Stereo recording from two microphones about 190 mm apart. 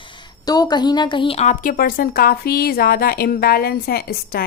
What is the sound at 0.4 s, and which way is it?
A woman's voice, 20° left (ahead or behind).